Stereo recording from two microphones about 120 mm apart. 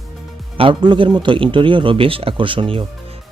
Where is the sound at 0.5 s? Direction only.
50° right (ahead or behind).